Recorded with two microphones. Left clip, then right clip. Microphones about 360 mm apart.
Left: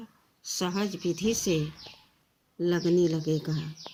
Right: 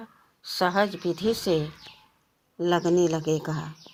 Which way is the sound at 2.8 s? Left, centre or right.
Right.